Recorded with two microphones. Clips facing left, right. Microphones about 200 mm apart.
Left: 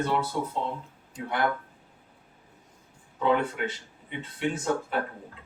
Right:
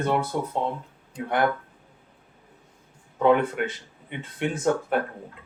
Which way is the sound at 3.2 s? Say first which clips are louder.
Right 5 dB; 55° right (ahead or behind).